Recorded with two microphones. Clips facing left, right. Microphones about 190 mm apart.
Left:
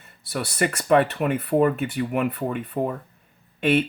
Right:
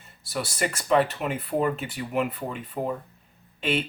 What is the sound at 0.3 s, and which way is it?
Speech, 60° left (ahead or behind).